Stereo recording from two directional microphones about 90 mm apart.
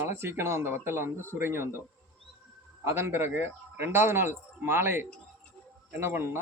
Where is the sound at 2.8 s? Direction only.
25° right (ahead or behind).